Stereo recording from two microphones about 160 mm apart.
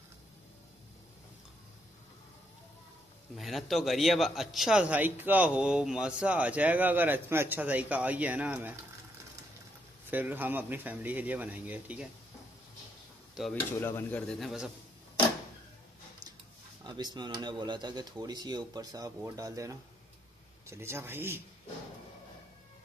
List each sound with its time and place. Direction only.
3.3 s a man's voice: centre (ahead or behind)
10.0 s a man's voice: 10° right (ahead or behind)
13.7 s speech: 15° left (ahead or behind)
16.8 s a man's voice: 25° right (ahead or behind)